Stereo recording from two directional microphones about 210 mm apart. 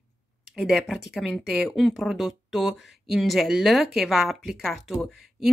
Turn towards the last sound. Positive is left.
turn(degrees=0)  # may be behind; listen again after turning